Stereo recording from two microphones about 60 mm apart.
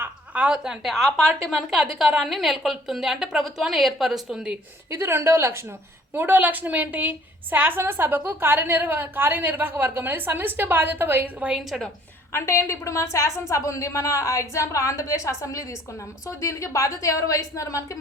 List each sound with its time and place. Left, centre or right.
0.5 s a woman's voice: centre
4.9 s speech: right
6.1 s a woman's voice: right
11.4 s a woman's voice: right
12.3 s a woman's voice: left